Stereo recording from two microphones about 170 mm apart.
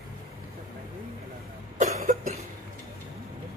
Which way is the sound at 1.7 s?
40° right (ahead or behind).